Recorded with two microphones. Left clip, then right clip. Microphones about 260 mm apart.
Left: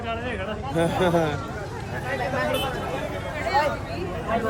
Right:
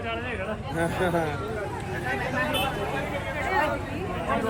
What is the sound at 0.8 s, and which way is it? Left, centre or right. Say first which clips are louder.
Speech: left 4 dB; left.